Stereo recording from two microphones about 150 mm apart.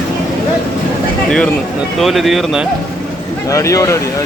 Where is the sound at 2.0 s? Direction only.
Centre (ahead or behind).